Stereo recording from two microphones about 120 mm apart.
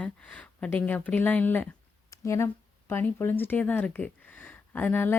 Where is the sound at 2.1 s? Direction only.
25° left (ahead or behind).